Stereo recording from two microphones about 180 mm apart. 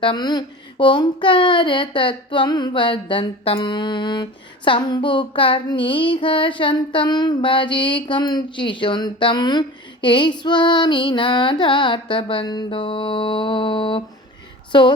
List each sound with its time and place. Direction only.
0.0 s a child's voice: 25° left (ahead or behind)